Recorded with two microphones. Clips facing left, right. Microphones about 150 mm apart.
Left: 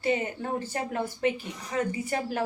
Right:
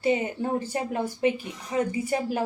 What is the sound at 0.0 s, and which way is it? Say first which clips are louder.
A woman's voice: right 3 dB; 20° right (ahead or behind).